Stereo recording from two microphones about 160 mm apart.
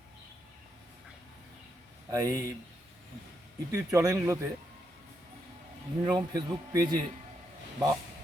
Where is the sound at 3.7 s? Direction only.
20° right (ahead or behind).